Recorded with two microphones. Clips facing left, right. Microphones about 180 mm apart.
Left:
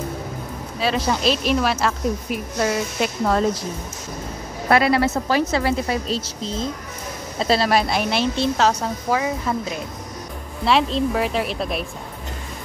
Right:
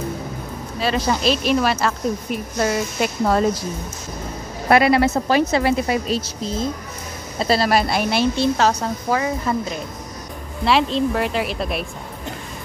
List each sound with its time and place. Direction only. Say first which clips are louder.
0.7 s speech: right 1 dB; centre (ahead or behind)
4.6 s a woman's voice: right 2 dB; 15° right (ahead or behind)